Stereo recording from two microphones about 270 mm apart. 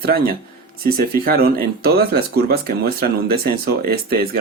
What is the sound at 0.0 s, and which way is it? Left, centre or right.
Speech, right.